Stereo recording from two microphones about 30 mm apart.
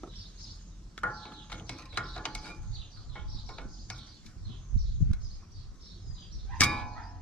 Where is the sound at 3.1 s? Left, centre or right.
Left.